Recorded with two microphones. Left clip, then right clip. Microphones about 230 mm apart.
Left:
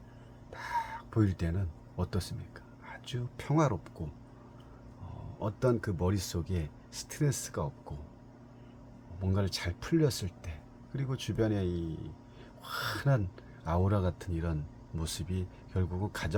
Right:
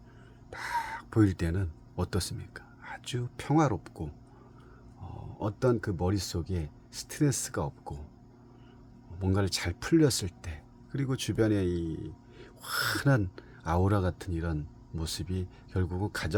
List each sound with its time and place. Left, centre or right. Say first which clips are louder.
0.5 s speech: right 2 dB; right
5.4 s speech: right 2 dB; right
9.2 s speech: right 4 dB; right